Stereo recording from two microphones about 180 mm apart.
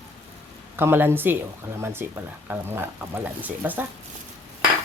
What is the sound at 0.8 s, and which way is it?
Speech, 10° right (ahead or behind).